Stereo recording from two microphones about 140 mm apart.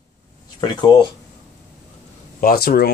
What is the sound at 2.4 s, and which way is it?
Speech, 90° left.